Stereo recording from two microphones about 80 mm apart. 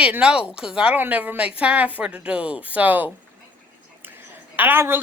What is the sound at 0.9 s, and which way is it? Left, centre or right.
A woman's voice, right.